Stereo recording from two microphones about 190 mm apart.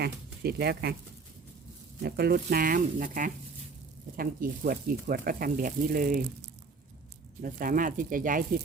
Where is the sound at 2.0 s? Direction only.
55° right (ahead or behind).